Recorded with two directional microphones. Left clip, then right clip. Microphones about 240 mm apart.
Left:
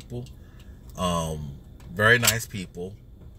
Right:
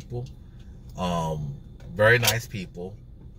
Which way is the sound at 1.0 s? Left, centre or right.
Centre.